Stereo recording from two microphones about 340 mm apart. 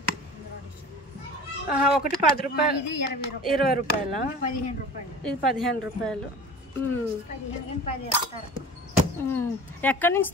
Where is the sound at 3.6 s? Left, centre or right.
Left.